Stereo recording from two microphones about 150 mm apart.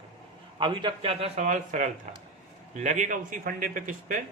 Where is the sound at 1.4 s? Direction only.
55° right (ahead or behind).